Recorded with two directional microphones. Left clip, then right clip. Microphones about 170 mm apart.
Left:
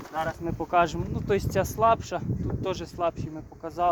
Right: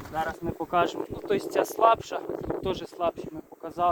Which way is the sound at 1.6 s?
15° left (ahead or behind).